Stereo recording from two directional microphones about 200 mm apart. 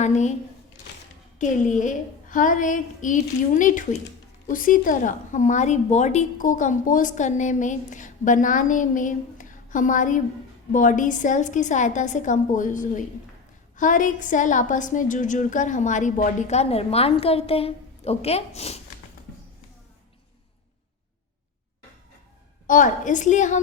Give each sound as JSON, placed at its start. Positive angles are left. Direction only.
{"t": 0.0, "sound": "a woman's voice", "side_deg": 35}
{"t": 1.4, "sound": "a woman's voice", "side_deg": 40}
{"t": 22.6, "sound": "a woman's voice", "side_deg": 40}